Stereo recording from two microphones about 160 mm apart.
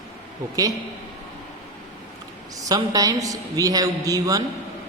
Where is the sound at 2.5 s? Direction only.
20° right (ahead or behind).